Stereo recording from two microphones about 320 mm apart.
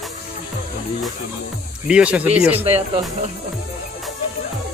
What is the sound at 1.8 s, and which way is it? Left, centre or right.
Speech, centre.